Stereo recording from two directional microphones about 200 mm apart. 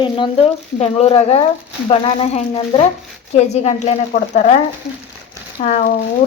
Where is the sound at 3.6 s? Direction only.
35° left (ahead or behind).